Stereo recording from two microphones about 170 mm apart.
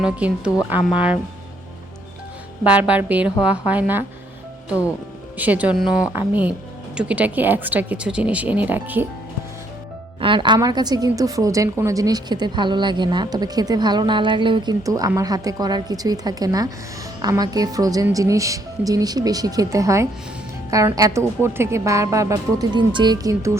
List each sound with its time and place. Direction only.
0.0 s speech: 5° right (ahead or behind)
2.6 s speech: 10° right (ahead or behind)
5.4 s speech: 10° right (ahead or behind)
10.2 s a woman's voice: 30° right (ahead or behind)